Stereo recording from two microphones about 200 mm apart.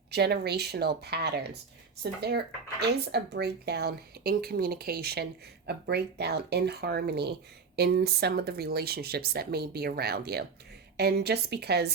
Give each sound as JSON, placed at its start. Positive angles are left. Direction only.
{"t": 0.1, "sound": "a woman's voice", "side_deg": -55}